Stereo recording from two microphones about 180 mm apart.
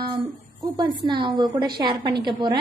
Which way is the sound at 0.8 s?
25° right (ahead or behind).